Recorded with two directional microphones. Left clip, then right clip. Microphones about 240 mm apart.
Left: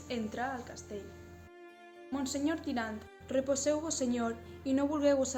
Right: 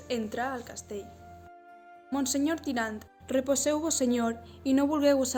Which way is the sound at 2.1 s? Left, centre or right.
Right.